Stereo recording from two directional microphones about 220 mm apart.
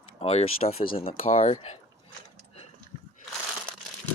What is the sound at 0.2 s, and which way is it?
Speech, 30° left (ahead or behind).